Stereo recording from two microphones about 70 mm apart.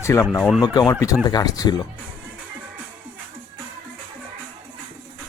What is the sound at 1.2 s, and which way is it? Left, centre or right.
Speech, left.